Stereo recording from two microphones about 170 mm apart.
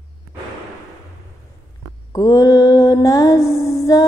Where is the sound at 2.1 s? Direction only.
20° left (ahead or behind).